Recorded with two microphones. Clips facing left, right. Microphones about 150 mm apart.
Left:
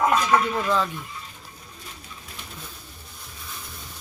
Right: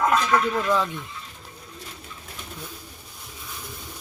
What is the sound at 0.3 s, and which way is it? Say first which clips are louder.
Speech: even; 20° left (ahead or behind).